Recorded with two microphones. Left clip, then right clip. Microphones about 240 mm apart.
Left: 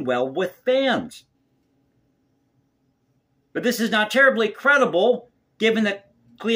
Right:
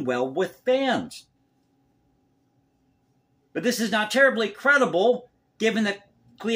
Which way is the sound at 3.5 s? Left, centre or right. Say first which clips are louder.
Left 3 dB; centre.